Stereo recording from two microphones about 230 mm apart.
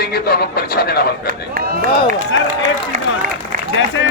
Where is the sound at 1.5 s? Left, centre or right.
Right.